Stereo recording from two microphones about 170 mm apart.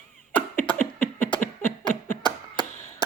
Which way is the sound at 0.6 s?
10° left (ahead or behind).